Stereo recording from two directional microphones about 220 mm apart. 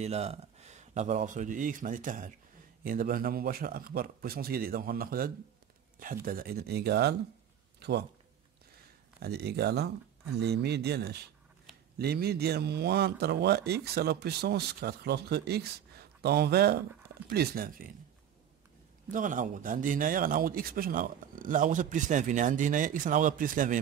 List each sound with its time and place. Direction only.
0.0 s a man's voice: 30° right (ahead or behind); by 7.2 s 50° right (ahead or behind)
9.2 s a man's voice: 45° right (ahead or behind)
19.0 s a man's voice: 35° right (ahead or behind)